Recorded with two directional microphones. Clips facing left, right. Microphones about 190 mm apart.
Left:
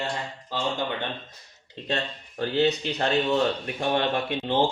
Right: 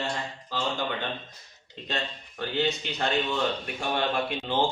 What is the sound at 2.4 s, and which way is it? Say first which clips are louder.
Speech: left 5 dB; 35° left (ahead or behind).